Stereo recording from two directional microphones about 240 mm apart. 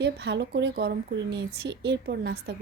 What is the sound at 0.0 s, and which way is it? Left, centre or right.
Speech, right.